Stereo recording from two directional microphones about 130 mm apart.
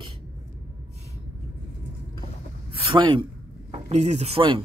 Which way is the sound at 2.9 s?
40° right (ahead or behind).